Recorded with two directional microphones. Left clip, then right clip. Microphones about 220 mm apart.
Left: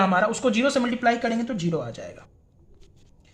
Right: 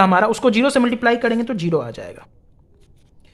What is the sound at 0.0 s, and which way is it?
Speech, 45° right (ahead or behind).